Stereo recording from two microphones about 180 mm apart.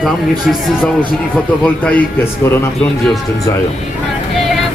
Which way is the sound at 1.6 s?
10° left (ahead or behind).